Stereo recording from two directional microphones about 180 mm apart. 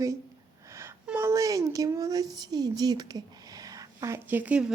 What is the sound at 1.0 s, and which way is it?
Speech, 15° right (ahead or behind).